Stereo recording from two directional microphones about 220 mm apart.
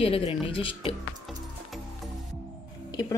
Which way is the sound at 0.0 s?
25° left (ahead or behind).